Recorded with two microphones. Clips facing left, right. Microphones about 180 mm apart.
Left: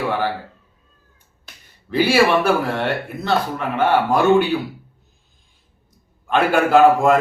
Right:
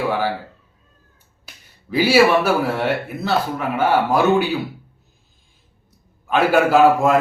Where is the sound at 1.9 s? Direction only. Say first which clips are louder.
Right 1 dB; 5° right (ahead or behind).